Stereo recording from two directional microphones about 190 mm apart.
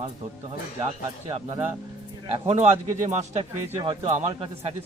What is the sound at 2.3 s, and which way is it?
Speech, 35° right (ahead or behind).